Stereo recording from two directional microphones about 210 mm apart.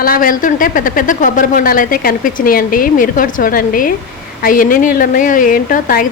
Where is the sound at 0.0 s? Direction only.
40° left (ahead or behind).